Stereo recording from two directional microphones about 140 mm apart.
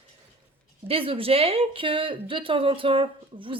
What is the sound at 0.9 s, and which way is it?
Speech, 40° right (ahead or behind).